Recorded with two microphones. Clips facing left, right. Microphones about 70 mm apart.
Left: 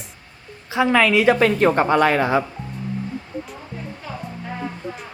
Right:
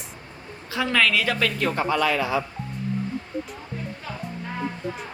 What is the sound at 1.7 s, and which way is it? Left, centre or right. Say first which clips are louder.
Speech: left 6 dB; left.